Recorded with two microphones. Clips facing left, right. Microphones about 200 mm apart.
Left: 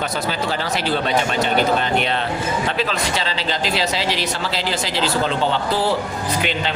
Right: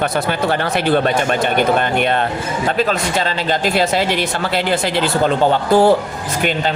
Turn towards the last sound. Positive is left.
turn(degrees=-50)  # may be behind; listen again after turning